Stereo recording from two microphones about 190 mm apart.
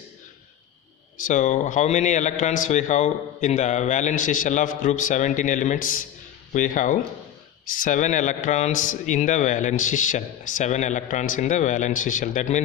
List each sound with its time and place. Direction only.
1.1 s a man's voice: 40° left (ahead or behind)